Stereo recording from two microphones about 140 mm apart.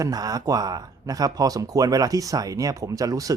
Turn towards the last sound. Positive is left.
turn(degrees=-25)  # may be behind; listen again after turning